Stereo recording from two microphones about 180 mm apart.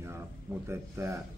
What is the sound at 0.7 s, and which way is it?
Speech, 15° right (ahead or behind).